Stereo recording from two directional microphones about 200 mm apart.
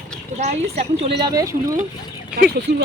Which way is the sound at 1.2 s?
15° right (ahead or behind).